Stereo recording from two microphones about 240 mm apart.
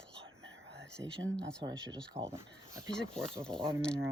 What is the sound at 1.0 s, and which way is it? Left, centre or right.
Speech, centre.